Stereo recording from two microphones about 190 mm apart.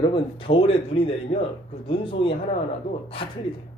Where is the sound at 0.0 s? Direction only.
25° left (ahead or behind).